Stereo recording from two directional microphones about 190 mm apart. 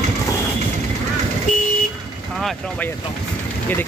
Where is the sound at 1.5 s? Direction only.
45° left (ahead or behind).